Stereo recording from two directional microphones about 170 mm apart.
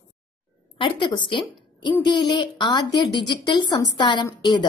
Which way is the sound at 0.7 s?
30° left (ahead or behind).